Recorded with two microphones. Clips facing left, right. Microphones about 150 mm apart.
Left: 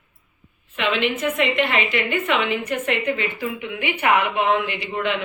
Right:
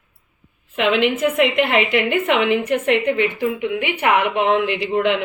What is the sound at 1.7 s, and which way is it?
A woman's voice, 75° right (ahead or behind).